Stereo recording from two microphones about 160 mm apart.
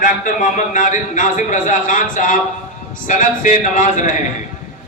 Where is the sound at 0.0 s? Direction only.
55° left (ahead or behind).